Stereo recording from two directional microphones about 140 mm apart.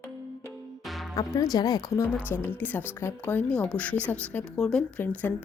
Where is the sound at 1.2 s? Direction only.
25° left (ahead or behind).